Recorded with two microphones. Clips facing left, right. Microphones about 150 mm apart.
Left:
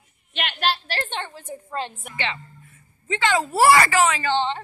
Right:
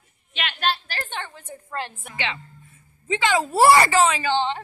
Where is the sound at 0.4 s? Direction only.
60° left (ahead or behind).